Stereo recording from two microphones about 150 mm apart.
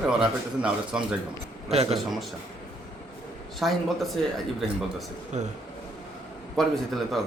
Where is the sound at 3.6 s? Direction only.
Centre (ahead or behind).